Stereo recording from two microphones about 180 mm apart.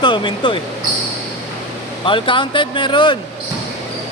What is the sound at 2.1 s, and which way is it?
Speech, 30° left (ahead or behind).